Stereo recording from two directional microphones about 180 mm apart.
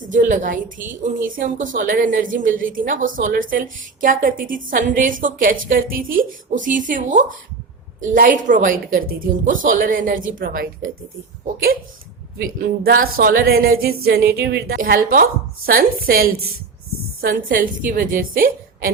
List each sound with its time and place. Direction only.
0.1 s a woman's voice: 45° right (ahead or behind)
12.4 s a woman's voice: 55° right (ahead or behind)